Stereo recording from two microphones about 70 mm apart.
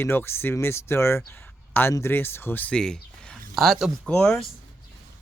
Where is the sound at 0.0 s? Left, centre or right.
Left.